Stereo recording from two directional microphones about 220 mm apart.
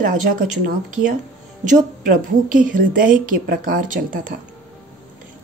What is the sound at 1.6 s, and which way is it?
Speech, 35° right (ahead or behind).